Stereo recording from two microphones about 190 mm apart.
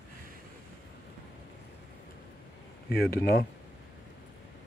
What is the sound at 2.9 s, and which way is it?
Speech, 55° left (ahead or behind).